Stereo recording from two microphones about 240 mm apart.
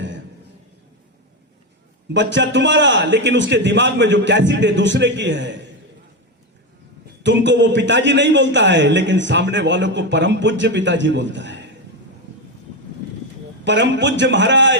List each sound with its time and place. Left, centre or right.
2.1 s a man's voice: right
7.2 s a man's voice: right
13.7 s a man's voice: right